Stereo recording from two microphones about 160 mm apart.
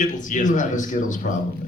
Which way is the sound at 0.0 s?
50° left (ahead or behind).